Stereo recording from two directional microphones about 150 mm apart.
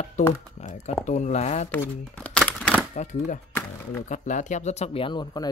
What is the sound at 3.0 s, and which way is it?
Speech, 55° left (ahead or behind).